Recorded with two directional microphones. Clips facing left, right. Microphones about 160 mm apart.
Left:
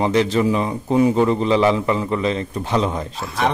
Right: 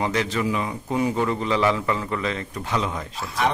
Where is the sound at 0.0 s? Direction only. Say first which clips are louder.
Left 7 dB; 25° left (ahead or behind).